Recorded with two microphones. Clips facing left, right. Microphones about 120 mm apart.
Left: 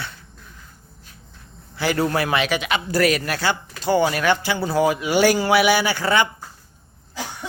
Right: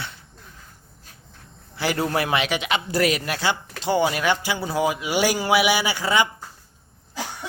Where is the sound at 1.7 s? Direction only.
25° right (ahead or behind).